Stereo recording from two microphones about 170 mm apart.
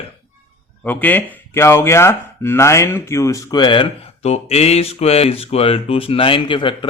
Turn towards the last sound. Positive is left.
turn(degrees=30)  # may be behind; listen again after turning